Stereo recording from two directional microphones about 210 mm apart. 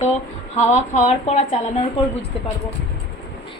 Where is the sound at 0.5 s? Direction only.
35° left (ahead or behind).